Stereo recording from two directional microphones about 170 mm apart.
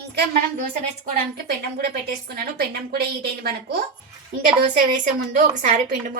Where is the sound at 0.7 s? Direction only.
65° right (ahead or behind).